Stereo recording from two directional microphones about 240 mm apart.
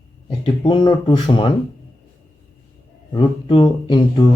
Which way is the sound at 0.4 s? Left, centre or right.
Left.